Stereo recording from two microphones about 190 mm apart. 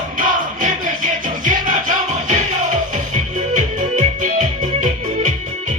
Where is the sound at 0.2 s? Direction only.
45° right (ahead or behind).